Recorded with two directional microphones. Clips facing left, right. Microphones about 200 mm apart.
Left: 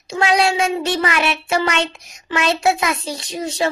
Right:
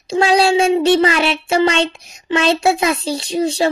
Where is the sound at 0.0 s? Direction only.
30° right (ahead or behind).